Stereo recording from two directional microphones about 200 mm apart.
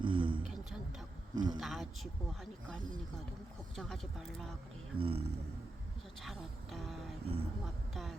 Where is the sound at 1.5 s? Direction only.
Centre (ahead or behind).